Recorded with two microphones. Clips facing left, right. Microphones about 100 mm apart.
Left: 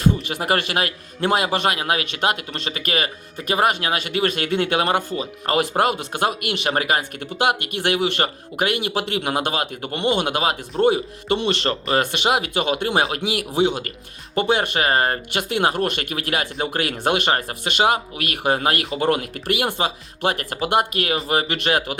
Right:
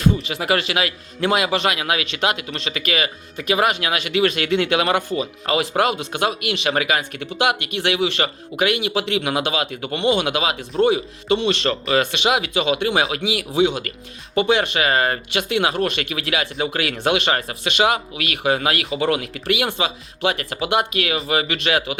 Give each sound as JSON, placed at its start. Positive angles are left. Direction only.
{"t": 0.2, "sound": "a man's voice", "side_deg": 50}
{"t": 5.2, "sound": "a man's voice", "side_deg": 50}